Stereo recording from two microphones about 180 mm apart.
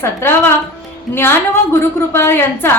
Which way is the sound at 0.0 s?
15° left (ahead or behind).